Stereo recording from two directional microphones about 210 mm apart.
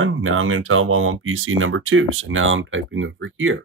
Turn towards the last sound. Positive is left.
turn(degrees=-70)  # may be behind; listen again after turning